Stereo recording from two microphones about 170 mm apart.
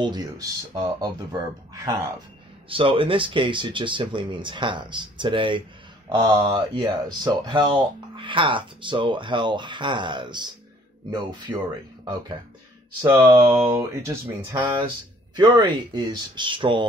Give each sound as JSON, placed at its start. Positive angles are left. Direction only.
{"t": 0.0, "sound": "speech", "side_deg": -25}
{"t": 2.7, "sound": "speech", "side_deg": -30}
{"t": 15.3, "sound": "speech", "side_deg": -25}